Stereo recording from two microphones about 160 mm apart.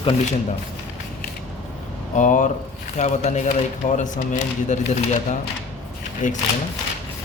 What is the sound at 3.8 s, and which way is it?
Speech, 55° left (ahead or behind).